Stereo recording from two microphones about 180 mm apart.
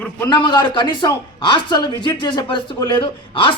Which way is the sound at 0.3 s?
25° left (ahead or behind).